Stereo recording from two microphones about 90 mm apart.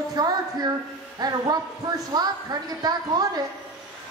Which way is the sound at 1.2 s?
50° right (ahead or behind).